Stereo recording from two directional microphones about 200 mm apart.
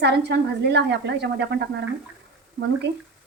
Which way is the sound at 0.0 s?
55° right (ahead or behind).